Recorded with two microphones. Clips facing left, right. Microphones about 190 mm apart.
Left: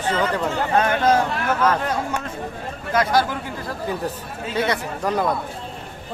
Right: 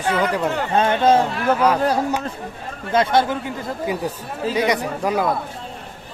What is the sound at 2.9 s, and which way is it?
Speech, 25° right (ahead or behind).